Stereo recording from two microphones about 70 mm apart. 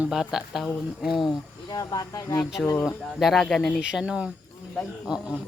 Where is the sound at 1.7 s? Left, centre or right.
Left.